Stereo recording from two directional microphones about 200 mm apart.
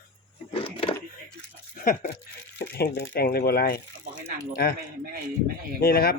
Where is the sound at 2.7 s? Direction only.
55° left (ahead or behind).